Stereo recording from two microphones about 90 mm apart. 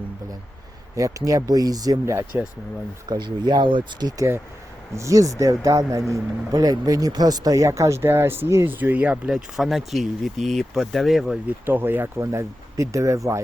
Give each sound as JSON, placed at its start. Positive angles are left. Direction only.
{"t": 0.9, "sound": "speech", "side_deg": -35}
{"t": 2.3, "sound": "speech", "side_deg": -25}
{"t": 3.1, "sound": "speech", "side_deg": -50}
{"t": 4.9, "sound": "speech", "side_deg": -35}
{"t": 11.6, "sound": "speech", "side_deg": -25}